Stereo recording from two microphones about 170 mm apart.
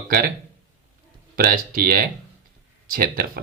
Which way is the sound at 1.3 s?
55° right (ahead or behind).